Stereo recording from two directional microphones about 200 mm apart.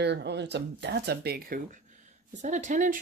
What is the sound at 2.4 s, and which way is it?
Speech, 35° right (ahead or behind).